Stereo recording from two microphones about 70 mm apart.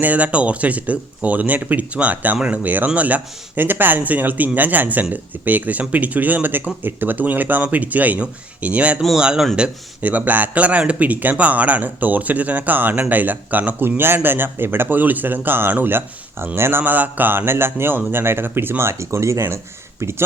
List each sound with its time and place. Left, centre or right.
0.0 s a man's voice: right
9.6 s speech: right